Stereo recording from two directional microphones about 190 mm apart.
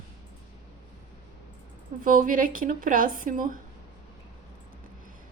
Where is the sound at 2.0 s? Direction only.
45° right (ahead or behind).